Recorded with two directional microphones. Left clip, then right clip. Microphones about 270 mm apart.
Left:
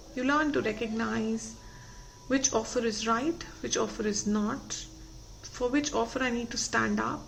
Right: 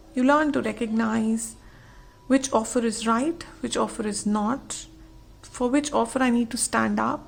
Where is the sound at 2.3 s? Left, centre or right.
Right.